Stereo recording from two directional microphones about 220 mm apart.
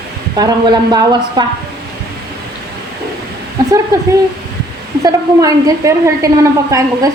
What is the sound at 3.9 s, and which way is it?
A woman's voice, 15° right (ahead or behind).